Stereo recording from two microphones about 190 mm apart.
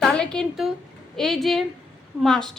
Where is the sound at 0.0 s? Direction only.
5° left (ahead or behind).